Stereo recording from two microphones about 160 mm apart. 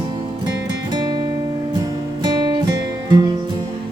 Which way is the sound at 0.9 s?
25° right (ahead or behind).